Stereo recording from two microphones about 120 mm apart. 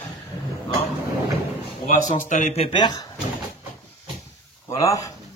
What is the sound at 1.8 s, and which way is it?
Speech, 85° left.